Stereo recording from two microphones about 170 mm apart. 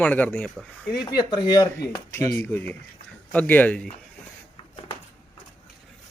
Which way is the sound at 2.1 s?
15° left (ahead or behind).